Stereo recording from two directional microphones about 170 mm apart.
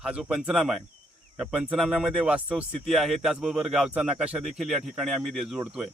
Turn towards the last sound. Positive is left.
turn(degrees=-5)  # may be behind; listen again after turning